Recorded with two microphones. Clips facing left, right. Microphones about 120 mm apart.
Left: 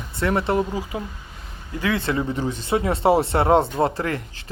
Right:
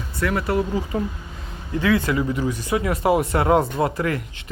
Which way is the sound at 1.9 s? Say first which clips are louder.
Right 2 dB; 30° left (ahead or behind).